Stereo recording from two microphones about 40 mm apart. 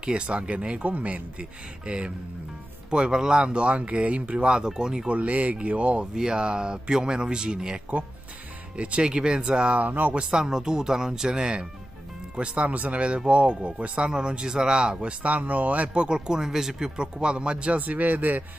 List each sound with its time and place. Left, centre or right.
0.0 s speech: right
0.8 s speech: right
1.4 s speech: right
5.0 s speech: right
6.1 s speech: centre
8.7 s speech: right
9.0 s speech: right
9.8 s speech: right
10.3 s speech: centre
12.4 s speech: right
15.2 s speech: right
17.8 s speech: right